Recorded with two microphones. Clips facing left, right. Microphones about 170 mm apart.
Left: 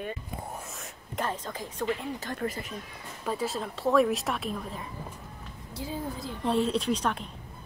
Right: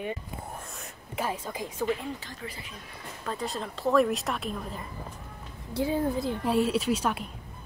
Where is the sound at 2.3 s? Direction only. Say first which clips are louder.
Left 8 dB; 50° left (ahead or behind).